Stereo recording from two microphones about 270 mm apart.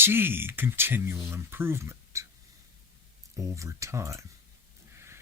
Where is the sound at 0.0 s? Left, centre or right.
Centre.